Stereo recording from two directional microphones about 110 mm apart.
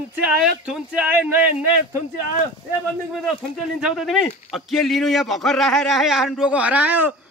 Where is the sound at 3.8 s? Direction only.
5° right (ahead or behind).